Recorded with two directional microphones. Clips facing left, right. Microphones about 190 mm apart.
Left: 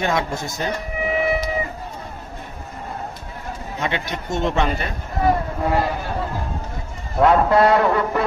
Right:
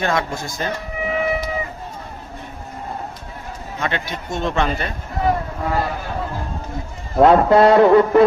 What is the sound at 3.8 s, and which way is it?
Speech, 20° left (ahead or behind).